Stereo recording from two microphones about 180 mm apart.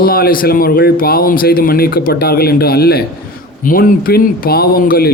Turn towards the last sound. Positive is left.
turn(degrees=55)  # may be behind; listen again after turning